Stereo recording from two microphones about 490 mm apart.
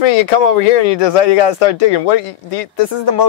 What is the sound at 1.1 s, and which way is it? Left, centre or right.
Speech, left.